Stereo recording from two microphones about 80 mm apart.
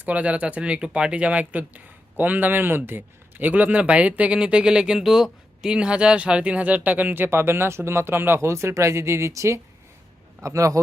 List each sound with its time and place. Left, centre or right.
0.0 s a man's voice: centre; by 10.8 s right